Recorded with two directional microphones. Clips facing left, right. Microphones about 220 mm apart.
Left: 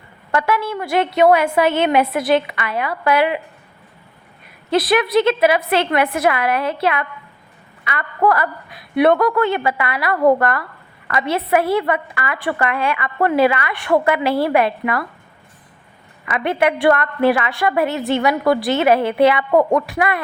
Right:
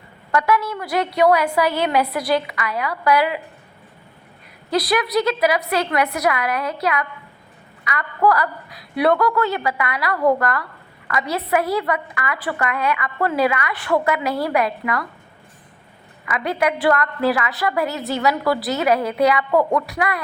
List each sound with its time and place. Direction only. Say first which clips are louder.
0.3 s a woman's voice: even; 25° left (ahead or behind)
4.7 s a woman's voice: left 4 dB; 25° left (ahead or behind)
16.2 s a woman's voice: left 3 dB; 25° left (ahead or behind)